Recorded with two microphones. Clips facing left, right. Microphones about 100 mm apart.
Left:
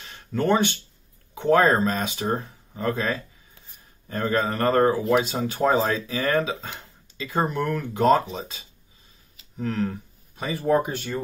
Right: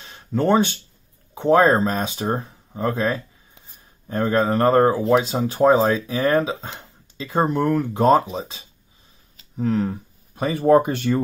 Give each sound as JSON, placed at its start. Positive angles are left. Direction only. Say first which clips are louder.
{"t": 0.0, "sound": "a sound", "louder": "right 4 dB", "side_deg": -20}
{"t": 1.3, "sound": "speech", "louder": "right 3 dB", "side_deg": -25}
{"t": 4.1, "sound": "speech", "louder": "right 5 dB", "side_deg": -20}
{"t": 10.3, "sound": "speech", "louder": "right 6 dB", "side_deg": -45}